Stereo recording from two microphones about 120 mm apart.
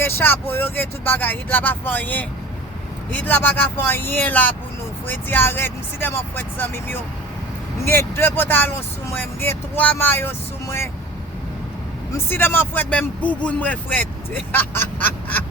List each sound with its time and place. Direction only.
0.0 s speech: 20° left (ahead or behind)
12.1 s speech: 20° left (ahead or behind)